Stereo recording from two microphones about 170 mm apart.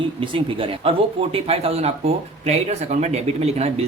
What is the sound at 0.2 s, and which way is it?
Speech, 30° right (ahead or behind).